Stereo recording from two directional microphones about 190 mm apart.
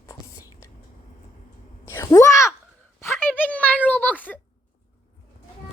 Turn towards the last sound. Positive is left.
turn(degrees=10)  # may be behind; listen again after turning